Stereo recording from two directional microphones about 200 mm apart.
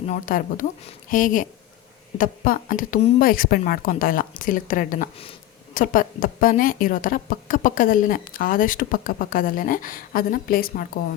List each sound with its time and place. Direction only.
0.1 s a woman's voice: 45° left (ahead or behind)